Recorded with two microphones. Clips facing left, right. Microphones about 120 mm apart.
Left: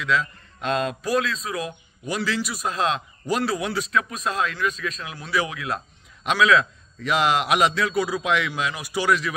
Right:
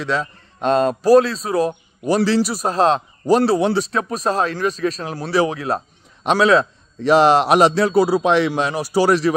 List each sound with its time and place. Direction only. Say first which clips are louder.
0.0 s a man's voice: right 2 dB; 35° right (ahead or behind)